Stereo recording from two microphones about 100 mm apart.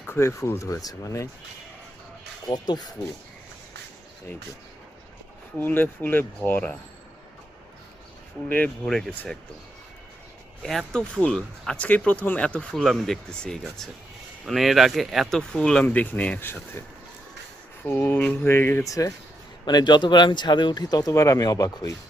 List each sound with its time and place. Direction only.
0.1 s speech: 30° left (ahead or behind)
2.5 s speech: 45° left (ahead or behind)
5.5 s speech: 20° left (ahead or behind)
8.4 s speech: 15° left (ahead or behind)
8.9 s speech: 5° left (ahead or behind)
10.6 s speech: 5° left (ahead or behind); by 16.8 s 20° left (ahead or behind)
17.8 s speech: 20° left (ahead or behind)
18.9 s speech: 35° left (ahead or behind)
19.6 s speech: 45° left (ahead or behind)